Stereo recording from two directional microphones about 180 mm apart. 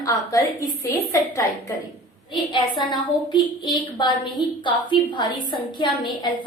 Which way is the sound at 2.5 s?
25° left (ahead or behind).